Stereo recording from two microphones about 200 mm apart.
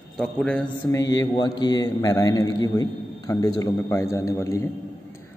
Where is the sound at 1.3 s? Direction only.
20° left (ahead or behind).